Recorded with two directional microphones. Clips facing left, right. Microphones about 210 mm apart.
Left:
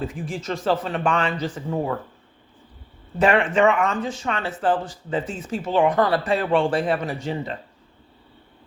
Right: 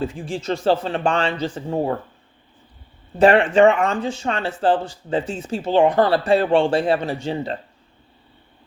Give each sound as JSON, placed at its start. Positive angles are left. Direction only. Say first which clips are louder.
{"t": 0.0, "sound": "speech", "louder": "right 3 dB", "side_deg": -30}
{"t": 3.2, "sound": "speech", "louder": "right 5 dB", "side_deg": -30}